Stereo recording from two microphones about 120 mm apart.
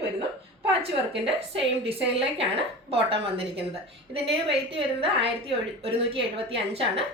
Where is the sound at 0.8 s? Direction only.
50° right (ahead or behind).